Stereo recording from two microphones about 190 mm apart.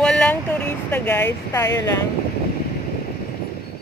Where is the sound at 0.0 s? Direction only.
5° left (ahead or behind).